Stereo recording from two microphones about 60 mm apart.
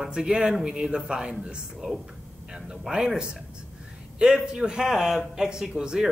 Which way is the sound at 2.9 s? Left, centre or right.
Centre.